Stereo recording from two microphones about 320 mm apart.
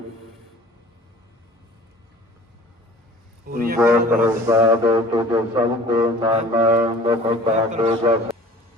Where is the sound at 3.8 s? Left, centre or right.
Centre.